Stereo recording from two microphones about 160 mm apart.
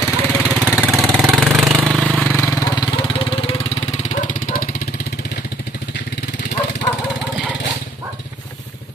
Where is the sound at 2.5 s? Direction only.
25° left (ahead or behind); by 6.5 s 90° left.